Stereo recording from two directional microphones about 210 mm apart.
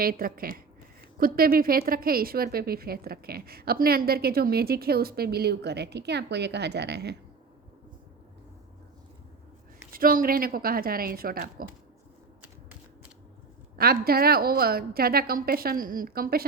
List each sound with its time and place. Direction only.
0.0 s a woman's voice: 45° right (ahead or behind)
9.9 s a woman's voice: 45° right (ahead or behind)
13.7 s a woman's voice: 45° right (ahead or behind)